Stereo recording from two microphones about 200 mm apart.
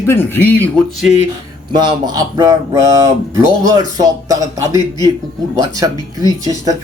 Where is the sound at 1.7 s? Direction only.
20° right (ahead or behind).